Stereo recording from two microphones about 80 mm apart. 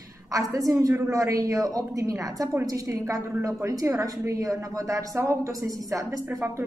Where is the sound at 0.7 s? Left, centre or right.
Right.